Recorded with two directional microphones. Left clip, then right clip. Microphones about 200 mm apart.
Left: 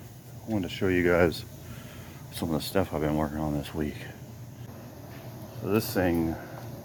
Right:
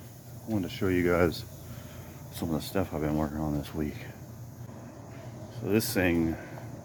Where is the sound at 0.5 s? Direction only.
10° right (ahead or behind).